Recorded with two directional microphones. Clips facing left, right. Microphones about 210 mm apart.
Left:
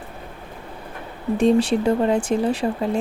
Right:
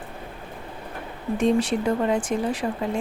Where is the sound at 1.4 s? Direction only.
30° left (ahead or behind).